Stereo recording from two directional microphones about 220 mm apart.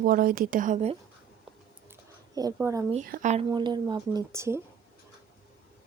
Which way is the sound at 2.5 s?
10° right (ahead or behind).